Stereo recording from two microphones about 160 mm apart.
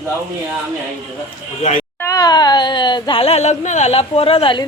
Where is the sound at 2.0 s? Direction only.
20° left (ahead or behind).